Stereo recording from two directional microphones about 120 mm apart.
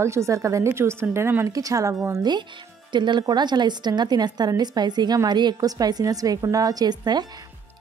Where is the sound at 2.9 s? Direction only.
40° right (ahead or behind).